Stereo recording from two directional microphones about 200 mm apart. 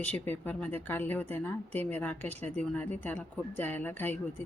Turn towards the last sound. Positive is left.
turn(degrees=10)  # may be behind; listen again after turning